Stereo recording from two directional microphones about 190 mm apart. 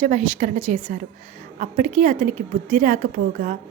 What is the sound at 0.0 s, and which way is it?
A woman's voice, 40° right (ahead or behind).